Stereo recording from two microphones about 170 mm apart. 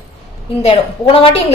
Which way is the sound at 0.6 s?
30° left (ahead or behind).